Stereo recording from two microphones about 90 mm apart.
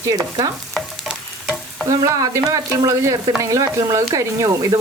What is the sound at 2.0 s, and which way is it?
Speech, 40° right (ahead or behind).